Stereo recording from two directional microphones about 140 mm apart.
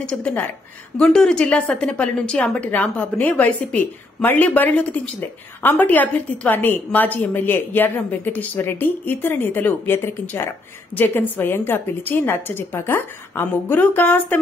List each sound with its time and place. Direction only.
0.0 s a woman's voice: 10° left (ahead or behind)